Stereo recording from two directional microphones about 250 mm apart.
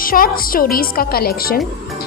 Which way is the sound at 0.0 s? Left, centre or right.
Left.